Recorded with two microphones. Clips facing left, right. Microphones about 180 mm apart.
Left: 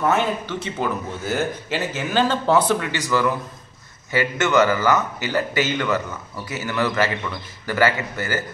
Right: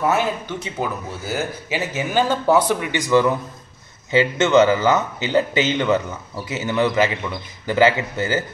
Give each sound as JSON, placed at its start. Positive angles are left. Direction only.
{"t": 0.1, "sound": "a man's voice", "side_deg": -10}